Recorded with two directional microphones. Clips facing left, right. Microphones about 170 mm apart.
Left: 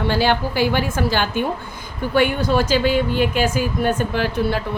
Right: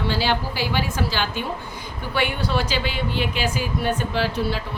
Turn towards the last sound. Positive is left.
turn(degrees=50)  # may be behind; listen again after turning